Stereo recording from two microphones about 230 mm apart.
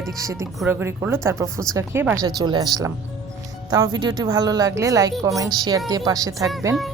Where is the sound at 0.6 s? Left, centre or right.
Centre.